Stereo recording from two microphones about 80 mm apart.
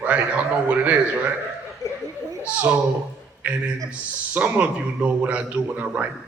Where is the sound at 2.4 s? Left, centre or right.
Right.